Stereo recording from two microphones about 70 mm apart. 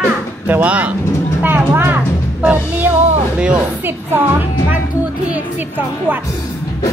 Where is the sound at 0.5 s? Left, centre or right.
Right.